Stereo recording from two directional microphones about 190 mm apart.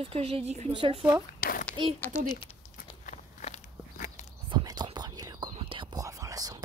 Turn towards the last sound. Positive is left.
turn(degrees=-20)  # may be behind; listen again after turning